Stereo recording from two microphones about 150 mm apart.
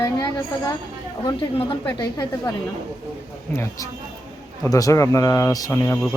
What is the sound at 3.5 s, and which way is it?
Speech, 20° left (ahead or behind).